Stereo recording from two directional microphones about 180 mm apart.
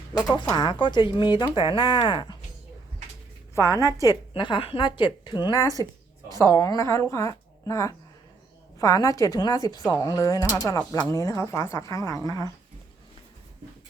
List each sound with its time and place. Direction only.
0.3 s speech: 20° left (ahead or behind)
3.7 s a woman's voice: 15° right (ahead or behind)
4.0 s a woman's voice: 25° left (ahead or behind)